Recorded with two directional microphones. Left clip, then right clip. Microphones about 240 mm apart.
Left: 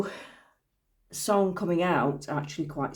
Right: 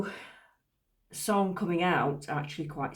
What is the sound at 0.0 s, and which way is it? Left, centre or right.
Speech, left.